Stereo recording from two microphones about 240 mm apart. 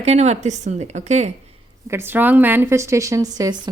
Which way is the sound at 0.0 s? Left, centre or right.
Right.